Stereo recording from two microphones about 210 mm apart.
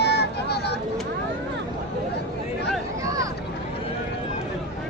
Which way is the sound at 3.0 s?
15° right (ahead or behind).